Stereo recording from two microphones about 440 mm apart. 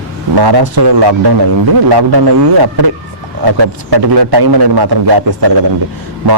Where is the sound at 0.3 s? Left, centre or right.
Right.